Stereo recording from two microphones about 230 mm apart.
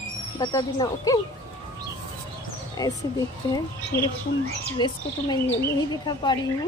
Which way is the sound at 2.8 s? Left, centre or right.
Centre.